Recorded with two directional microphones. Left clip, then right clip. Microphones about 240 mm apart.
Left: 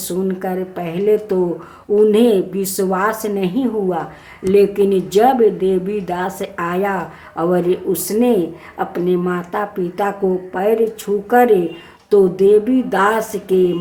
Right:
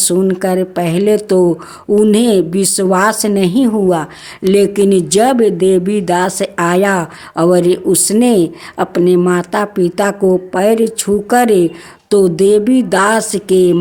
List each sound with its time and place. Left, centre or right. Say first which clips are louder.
0.0 s speech: right 8 dB; right